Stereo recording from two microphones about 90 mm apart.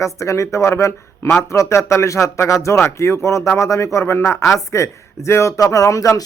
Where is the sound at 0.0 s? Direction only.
35° left (ahead or behind).